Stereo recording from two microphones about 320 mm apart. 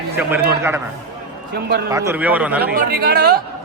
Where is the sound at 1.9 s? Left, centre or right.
Centre.